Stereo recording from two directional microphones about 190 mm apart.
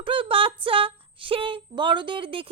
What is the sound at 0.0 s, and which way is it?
Speech, 25° right (ahead or behind).